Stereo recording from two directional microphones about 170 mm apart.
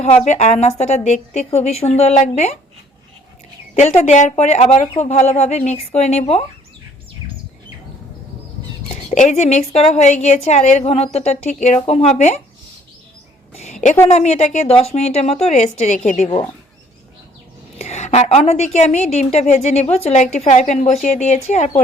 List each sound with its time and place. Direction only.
0.3 s a woman's voice: 40° left (ahead or behind)
3.8 s a woman's voice: 45° left (ahead or behind)
9.0 s a woman's voice: 45° left (ahead or behind)
14.1 s a woman's voice: 40° left (ahead or behind)
17.7 s a woman's voice: 40° left (ahead or behind)